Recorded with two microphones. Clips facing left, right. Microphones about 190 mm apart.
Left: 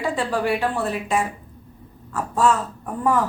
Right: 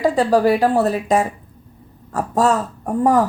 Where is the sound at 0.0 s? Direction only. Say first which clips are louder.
Right 8 dB; 40° right (ahead or behind).